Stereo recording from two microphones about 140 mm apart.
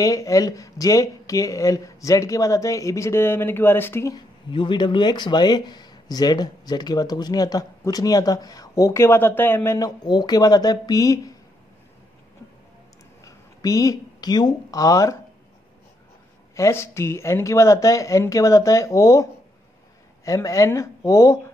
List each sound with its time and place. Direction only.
0.0 s speech: 25° left (ahead or behind)
4.1 s speech: 35° left (ahead or behind); by 9.8 s 15° left (ahead or behind)
9.8 s speech: 30° left (ahead or behind)
13.2 s a woman's voice: 25° left (ahead or behind)
16.5 s speech: 20° left (ahead or behind)
20.2 s speech: 20° left (ahead or behind)